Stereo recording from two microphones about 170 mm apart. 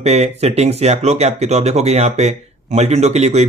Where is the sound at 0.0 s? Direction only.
40° right (ahead or behind).